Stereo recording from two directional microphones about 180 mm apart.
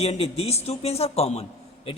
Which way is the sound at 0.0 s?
35° left (ahead or behind).